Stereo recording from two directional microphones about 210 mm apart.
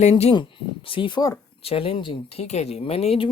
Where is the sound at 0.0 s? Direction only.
30° left (ahead or behind).